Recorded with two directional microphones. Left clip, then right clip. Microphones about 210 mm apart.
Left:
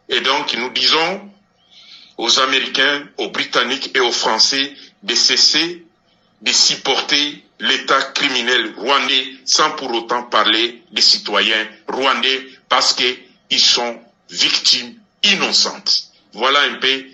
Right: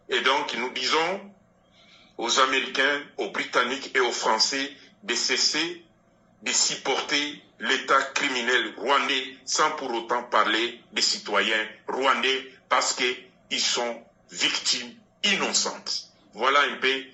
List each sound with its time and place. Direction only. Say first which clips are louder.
0.1 s speech: left 7 dB; 45° left (ahead or behind)